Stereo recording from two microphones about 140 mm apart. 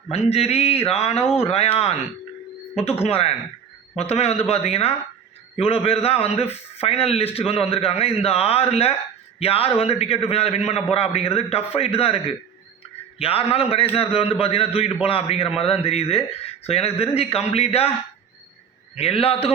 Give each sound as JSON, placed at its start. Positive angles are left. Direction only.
{"t": 0.1, "sound": "a man's voice", "side_deg": 50}
{"t": 18.9, "sound": "a man's voice", "side_deg": 45}